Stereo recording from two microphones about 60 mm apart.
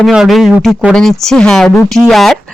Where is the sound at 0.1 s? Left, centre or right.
Centre.